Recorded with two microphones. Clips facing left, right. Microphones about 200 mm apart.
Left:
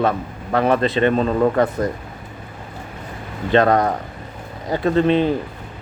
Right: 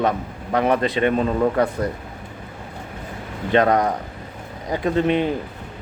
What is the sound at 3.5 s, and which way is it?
A man's voice, 15° right (ahead or behind).